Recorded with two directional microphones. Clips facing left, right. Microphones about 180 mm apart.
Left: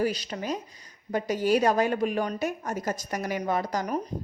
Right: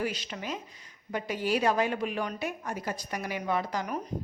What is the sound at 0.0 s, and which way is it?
A woman's voice, 40° left (ahead or behind).